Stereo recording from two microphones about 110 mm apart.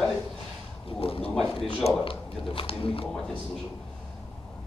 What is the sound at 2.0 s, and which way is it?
Speech, 55° left (ahead or behind).